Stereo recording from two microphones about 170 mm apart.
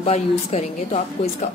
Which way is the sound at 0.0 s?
40° left (ahead or behind).